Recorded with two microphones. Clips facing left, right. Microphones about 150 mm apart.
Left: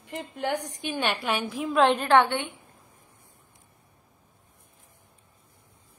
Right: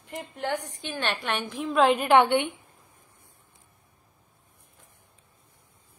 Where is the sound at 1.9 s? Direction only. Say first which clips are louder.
Right 1 dB; 15° right (ahead or behind).